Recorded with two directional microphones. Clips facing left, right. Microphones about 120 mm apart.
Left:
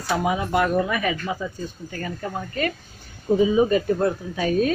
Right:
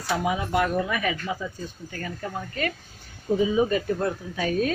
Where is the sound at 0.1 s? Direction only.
50° left (ahead or behind).